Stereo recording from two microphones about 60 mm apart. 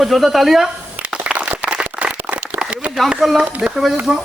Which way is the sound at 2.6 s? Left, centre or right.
Centre.